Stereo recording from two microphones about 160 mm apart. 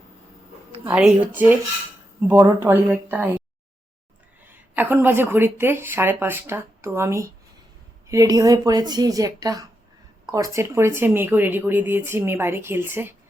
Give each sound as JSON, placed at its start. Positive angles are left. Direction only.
{"t": 0.9, "sound": "speech", "side_deg": -5}
{"t": 4.4, "sound": "a woman's voice", "side_deg": -10}